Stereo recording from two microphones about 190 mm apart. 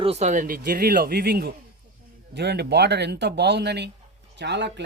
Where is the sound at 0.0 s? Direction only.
35° right (ahead or behind).